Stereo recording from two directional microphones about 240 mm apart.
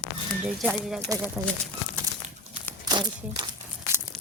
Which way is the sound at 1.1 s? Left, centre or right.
Centre.